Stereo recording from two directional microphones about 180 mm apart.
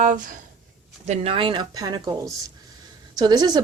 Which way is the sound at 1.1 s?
30° right (ahead or behind).